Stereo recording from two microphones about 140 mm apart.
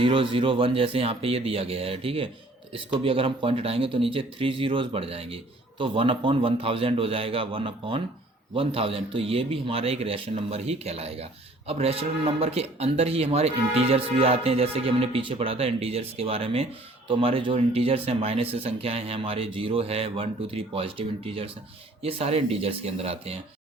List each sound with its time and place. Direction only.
0.0 s a man's voice: 40° right (ahead or behind)